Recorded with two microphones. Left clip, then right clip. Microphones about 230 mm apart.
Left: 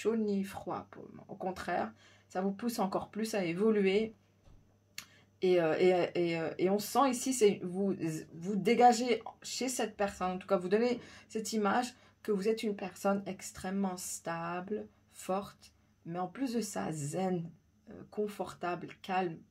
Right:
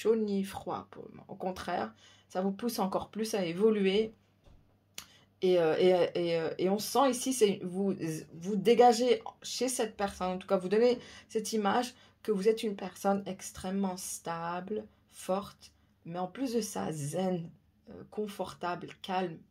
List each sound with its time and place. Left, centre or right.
0.0 s speech: right